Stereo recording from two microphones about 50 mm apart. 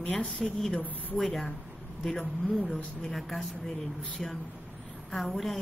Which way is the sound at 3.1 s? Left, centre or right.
Centre.